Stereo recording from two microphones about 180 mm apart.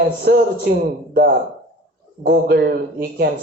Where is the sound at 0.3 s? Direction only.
65° right (ahead or behind).